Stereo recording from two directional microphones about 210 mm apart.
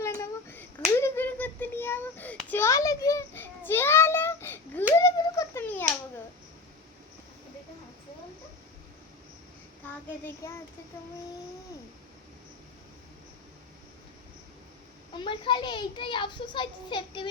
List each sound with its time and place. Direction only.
0.0 s hands: 15° left (ahead or behind)
4.9 s a sound: 15° left (ahead or behind)
9.8 s child singing: 10° left (ahead or behind)
15.2 s a child's voice: 25° left (ahead or behind)